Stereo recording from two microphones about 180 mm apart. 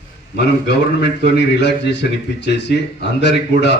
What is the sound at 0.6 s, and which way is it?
A man's voice, 70° left (ahead or behind).